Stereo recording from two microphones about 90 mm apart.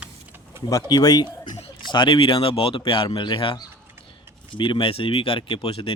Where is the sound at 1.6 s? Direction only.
60° left (ahead or behind).